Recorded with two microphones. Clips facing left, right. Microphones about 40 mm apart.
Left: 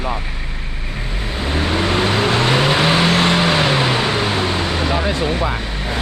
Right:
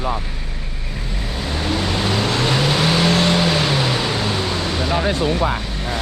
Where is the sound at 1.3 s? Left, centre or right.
Left.